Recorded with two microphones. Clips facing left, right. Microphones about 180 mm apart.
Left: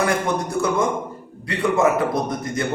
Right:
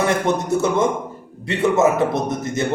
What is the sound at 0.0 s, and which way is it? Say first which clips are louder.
A man's voice: right 2 dB; 25° right (ahead or behind).